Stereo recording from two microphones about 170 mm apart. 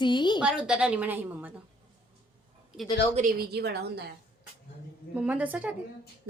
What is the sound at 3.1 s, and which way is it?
Speech, 60° right (ahead or behind).